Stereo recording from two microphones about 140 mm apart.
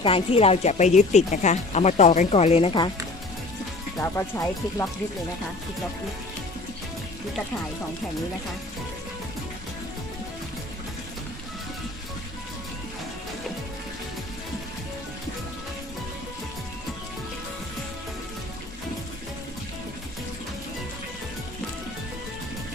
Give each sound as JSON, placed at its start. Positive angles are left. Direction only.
{"t": 0.0, "sound": "speech", "side_deg": 40}
{"t": 2.3, "sound": "speech", "side_deg": 45}
{"t": 3.9, "sound": "speech", "side_deg": 20}